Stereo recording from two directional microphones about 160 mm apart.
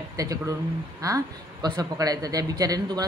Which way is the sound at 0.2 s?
20° right (ahead or behind).